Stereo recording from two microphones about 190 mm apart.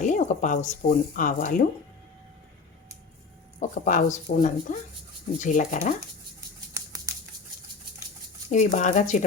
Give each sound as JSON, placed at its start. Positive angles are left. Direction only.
{"t": 0.0, "sound": "speech", "side_deg": 40}
{"t": 3.6, "sound": "speech", "side_deg": 45}
{"t": 6.7, "sound": "a sound", "side_deg": -20}
{"t": 8.4, "sound": "speech", "side_deg": 40}